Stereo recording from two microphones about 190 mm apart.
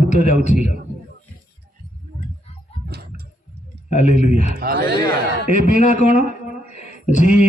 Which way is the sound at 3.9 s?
40° left (ahead or behind).